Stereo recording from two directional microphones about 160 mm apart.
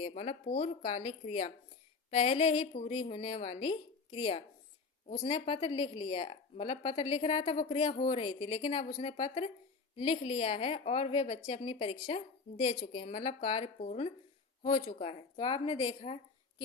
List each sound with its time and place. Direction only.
0.1 s a woman's voice: 40° left (ahead or behind)